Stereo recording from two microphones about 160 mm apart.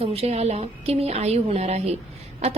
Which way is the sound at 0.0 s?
40° right (ahead or behind).